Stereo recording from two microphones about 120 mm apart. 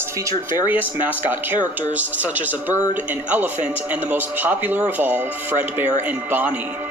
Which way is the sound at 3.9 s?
15° right (ahead or behind).